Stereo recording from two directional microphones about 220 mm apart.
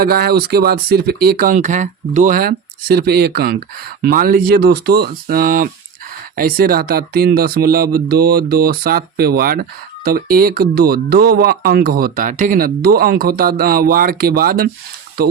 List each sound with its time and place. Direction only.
0.0 s speech: 45° right (ahead or behind)